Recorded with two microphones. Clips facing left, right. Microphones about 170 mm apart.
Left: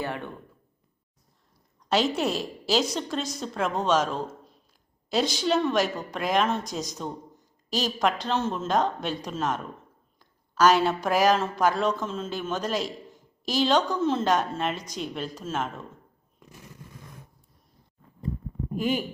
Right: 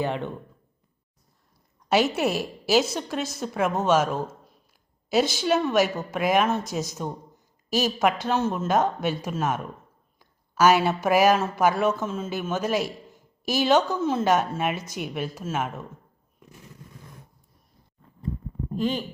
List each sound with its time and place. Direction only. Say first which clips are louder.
0.0 s speech: right 5 dB; 20° right (ahead or behind)
1.9 s a woman's voice: right 2 dB; 10° right (ahead or behind)
18.7 s speech: even; 10° left (ahead or behind)